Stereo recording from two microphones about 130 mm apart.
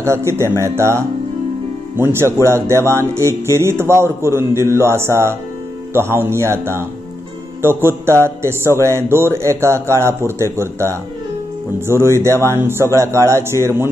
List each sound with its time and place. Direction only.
0.0 s speech: 20° right (ahead or behind)